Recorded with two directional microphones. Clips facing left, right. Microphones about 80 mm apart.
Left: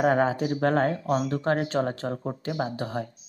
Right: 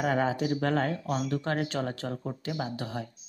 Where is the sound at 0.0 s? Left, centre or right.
Left.